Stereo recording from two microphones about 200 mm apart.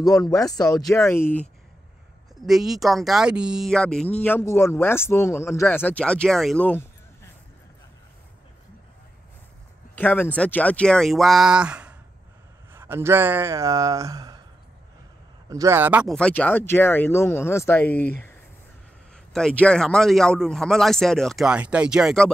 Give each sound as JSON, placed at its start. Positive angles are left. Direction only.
{"t": 0.1, "sound": "speech", "side_deg": 0}
{"t": 0.5, "sound": "speech", "side_deg": 20}
{"t": 2.4, "sound": "speech", "side_deg": 0}
{"t": 9.9, "sound": "speech", "side_deg": 10}
{"t": 15.5, "sound": "speech", "side_deg": -15}
{"t": 16.2, "sound": "speech", "side_deg": 5}
{"t": 19.3, "sound": "speech", "side_deg": 5}